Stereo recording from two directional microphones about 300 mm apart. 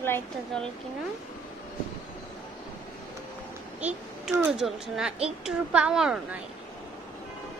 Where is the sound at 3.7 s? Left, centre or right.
Centre.